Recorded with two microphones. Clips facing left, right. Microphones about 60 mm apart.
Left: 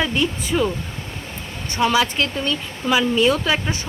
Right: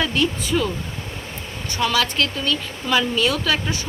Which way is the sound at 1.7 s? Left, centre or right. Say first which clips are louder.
Left 3 dB; left.